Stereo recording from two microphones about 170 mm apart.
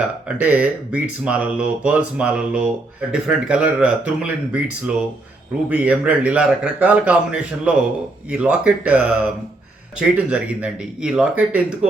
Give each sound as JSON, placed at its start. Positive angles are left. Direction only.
{"t": 0.3, "sound": "speech", "side_deg": -10}